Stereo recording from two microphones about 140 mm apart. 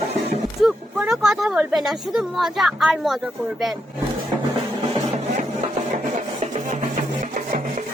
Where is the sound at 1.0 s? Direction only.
5° right (ahead or behind).